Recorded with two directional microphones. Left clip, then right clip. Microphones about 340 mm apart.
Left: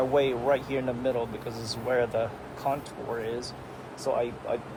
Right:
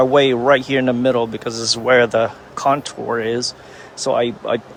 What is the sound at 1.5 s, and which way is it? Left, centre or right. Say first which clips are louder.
Speech: right 14 dB; right.